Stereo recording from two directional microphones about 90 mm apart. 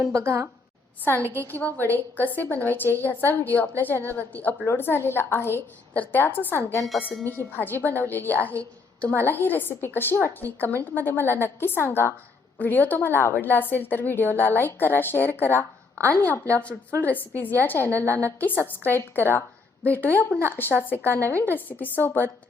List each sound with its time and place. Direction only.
0.0 s a woman's voice: 35° right (ahead or behind)
1.3 s a woman's voice: 20° left (ahead or behind)
6.8 s speech: centre (ahead or behind)
7.3 s a woman's voice: 20° left (ahead or behind)
17.0 s a woman's voice: 20° left (ahead or behind)